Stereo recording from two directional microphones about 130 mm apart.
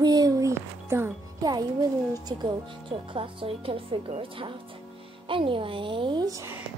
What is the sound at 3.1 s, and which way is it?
Speech, 45° right (ahead or behind).